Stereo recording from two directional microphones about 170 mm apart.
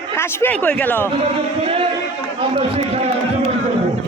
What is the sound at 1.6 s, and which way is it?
A man's voice, 35° right (ahead or behind).